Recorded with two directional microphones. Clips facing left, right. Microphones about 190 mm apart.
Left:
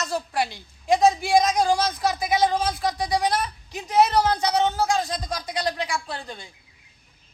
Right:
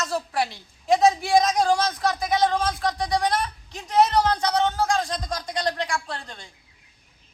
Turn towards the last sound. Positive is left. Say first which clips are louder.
# left 1 dB
turn(degrees=5)  # may be behind; listen again after turning